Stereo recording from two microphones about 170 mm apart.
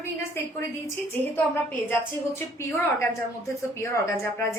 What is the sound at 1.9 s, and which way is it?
A woman's voice, 15° left (ahead or behind).